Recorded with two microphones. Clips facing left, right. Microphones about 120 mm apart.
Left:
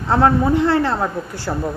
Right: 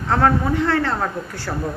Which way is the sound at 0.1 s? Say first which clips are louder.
Left 3 dB; 20° left (ahead or behind).